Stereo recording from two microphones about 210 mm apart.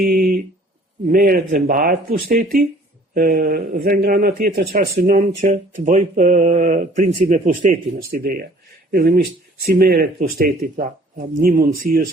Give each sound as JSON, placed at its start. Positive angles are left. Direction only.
{"t": 0.0, "sound": "speech", "side_deg": -40}